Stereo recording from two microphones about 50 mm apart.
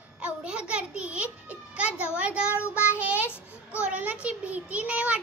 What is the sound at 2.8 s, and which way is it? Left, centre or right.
Child singing, right.